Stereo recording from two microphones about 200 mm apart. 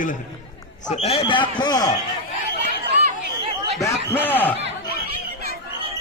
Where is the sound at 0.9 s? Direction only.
30° left (ahead or behind).